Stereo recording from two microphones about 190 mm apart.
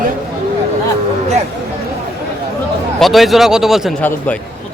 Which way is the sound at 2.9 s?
Centre (ahead or behind).